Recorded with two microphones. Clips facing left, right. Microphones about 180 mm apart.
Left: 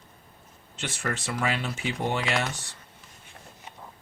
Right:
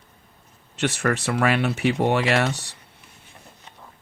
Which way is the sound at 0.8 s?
70° right (ahead or behind).